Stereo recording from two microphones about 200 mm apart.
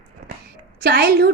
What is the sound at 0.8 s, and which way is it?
Speech, 50° right (ahead or behind).